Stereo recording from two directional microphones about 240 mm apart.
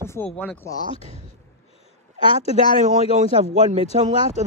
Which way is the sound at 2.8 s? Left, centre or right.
Right.